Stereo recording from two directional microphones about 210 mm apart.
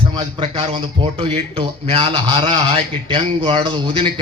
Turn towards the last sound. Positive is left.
turn(degrees=-25)  # may be behind; listen again after turning